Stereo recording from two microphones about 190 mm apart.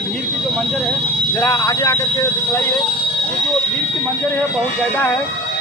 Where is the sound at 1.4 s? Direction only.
15° left (ahead or behind).